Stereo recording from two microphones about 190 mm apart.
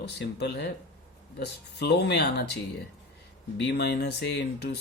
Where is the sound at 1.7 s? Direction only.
60° left (ahead or behind).